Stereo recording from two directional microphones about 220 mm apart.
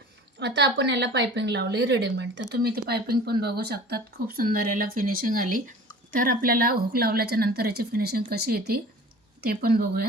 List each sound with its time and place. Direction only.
0.3 s a woman's voice: 50° right (ahead or behind)